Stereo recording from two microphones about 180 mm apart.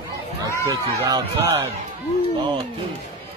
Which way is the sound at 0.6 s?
20° right (ahead or behind).